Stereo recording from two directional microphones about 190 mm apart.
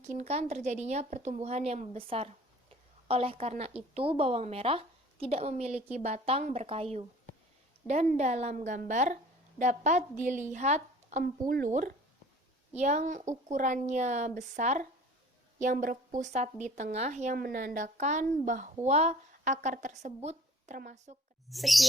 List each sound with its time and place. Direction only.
0.0 s a woman's voice: 35° right (ahead or behind)
11.2 s a woman's voice: 50° right (ahead or behind)
21.5 s speech: centre (ahead or behind)